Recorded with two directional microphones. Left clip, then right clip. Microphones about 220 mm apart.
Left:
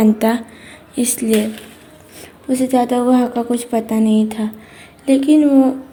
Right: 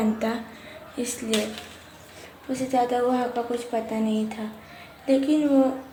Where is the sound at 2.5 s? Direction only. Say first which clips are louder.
Left 8 dB; 45° left (ahead or behind).